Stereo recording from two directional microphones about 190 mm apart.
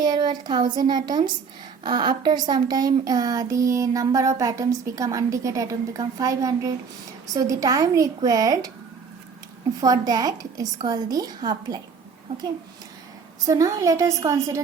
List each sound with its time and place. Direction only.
0.0 s a woman's voice: 25° right (ahead or behind)
9.8 s a woman's voice: 20° right (ahead or behind)
13.4 s a woman's voice: 15° right (ahead or behind)